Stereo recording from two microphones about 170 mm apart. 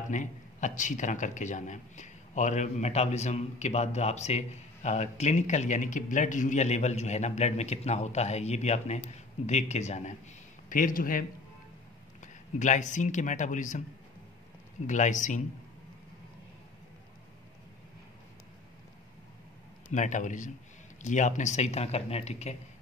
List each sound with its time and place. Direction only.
0.1 s a man's voice: 45° left (ahead or behind)
12.5 s a man's voice: 45° left (ahead or behind)
14.9 s a man's voice: 45° left (ahead or behind)
19.9 s a man's voice: 45° left (ahead or behind)